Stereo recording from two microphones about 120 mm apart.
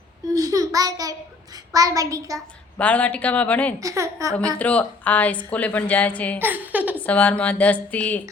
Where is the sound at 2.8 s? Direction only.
10° left (ahead or behind).